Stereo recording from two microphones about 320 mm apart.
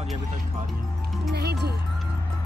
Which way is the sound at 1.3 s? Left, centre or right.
Right.